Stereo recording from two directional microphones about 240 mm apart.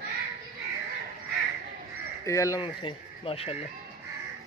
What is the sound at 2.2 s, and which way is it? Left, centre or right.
Speech, centre.